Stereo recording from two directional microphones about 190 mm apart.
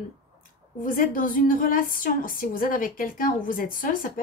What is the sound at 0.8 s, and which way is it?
A woman's voice, 50° left (ahead or behind).